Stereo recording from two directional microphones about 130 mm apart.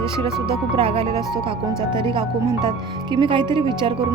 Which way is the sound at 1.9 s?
40° right (ahead or behind).